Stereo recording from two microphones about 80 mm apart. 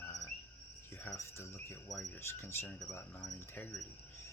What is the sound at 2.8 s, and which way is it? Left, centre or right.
Speech, left.